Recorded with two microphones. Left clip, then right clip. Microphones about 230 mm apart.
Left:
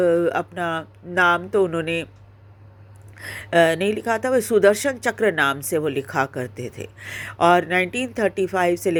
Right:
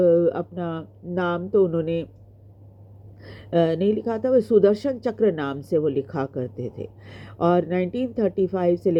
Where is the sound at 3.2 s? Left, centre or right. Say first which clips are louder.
Left 5 dB; centre.